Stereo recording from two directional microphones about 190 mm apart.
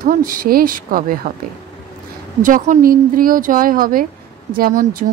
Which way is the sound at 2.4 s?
45° right (ahead or behind).